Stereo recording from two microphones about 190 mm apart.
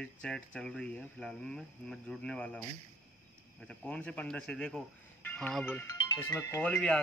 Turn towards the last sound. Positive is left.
turn(degrees=5)  # may be behind; listen again after turning